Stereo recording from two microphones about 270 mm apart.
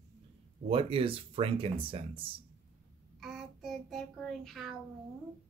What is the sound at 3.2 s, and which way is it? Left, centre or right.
Child singing, centre.